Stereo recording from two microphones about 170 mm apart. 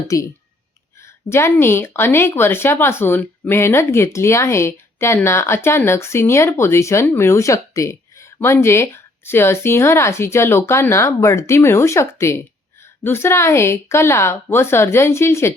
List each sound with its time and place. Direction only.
0.1 s speech: 20° left (ahead or behind)